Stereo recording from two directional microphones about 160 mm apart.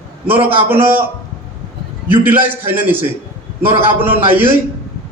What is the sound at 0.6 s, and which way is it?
Speech, 10° right (ahead or behind).